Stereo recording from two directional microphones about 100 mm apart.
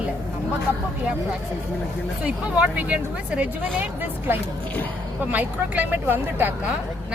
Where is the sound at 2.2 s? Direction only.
15° right (ahead or behind).